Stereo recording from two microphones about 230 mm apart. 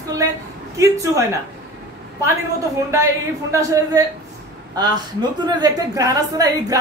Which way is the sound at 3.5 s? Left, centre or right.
Centre.